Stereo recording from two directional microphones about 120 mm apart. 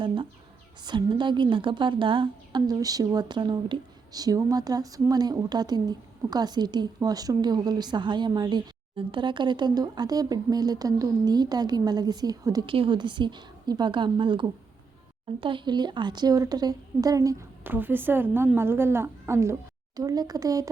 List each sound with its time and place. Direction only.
0.8 s a woman's voice: 40° right (ahead or behind)
12.6 s a woman's voice: 45° right (ahead or behind); by 17.4 s 30° right (ahead or behind)
17.6 s a woman's voice: 15° right (ahead or behind)